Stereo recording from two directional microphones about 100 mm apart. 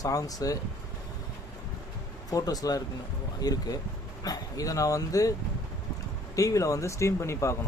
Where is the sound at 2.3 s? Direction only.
40° left (ahead or behind).